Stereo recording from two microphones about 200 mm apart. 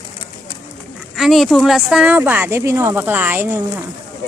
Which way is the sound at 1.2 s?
Centre (ahead or behind).